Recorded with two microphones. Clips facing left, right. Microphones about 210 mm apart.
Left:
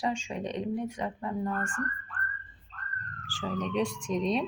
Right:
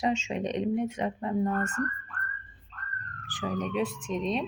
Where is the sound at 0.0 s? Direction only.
25° right (ahead or behind).